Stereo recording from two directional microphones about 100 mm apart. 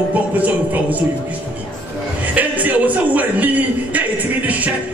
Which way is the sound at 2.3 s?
15° right (ahead or behind).